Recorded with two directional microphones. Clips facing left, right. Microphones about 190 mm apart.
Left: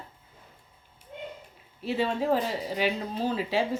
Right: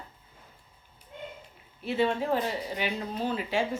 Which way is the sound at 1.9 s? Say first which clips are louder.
Left 1 dB; 35° left (ahead or behind).